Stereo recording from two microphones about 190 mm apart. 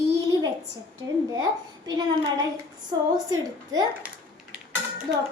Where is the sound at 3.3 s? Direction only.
20° right (ahead or behind).